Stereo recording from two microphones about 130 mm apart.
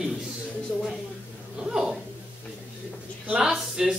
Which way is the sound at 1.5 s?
5° right (ahead or behind).